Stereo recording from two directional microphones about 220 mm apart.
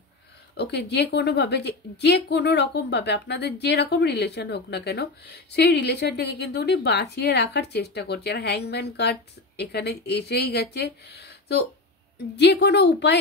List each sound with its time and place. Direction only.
0.6 s a woman's voice: 50° left (ahead or behind)